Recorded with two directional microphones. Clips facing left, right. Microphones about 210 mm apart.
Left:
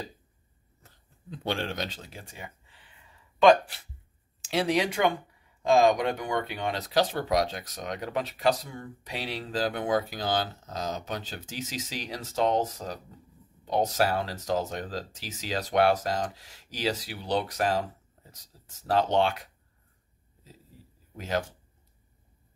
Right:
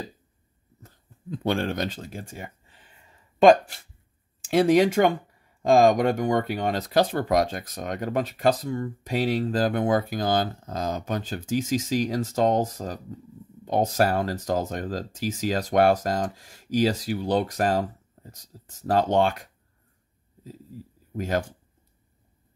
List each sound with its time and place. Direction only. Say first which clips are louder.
0.8 s speech: right 7 dB; 50° right (ahead or behind)
21.2 s speech: right 4 dB; 50° right (ahead or behind)